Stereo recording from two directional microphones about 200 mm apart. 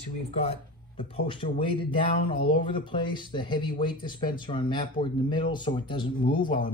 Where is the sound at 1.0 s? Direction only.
25° left (ahead or behind).